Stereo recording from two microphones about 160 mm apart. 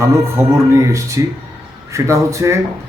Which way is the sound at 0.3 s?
20° right (ahead or behind).